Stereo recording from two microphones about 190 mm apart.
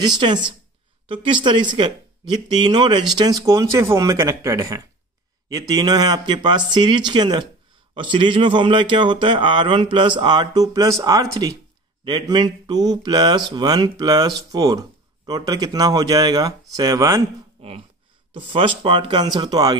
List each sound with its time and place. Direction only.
1.0 s speech: 25° right (ahead or behind)
17.6 s speech: 30° right (ahead or behind)